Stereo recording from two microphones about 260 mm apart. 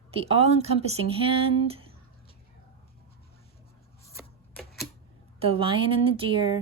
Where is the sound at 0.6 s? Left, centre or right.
Right.